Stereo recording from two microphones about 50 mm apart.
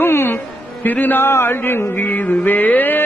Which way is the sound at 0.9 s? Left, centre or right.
Left.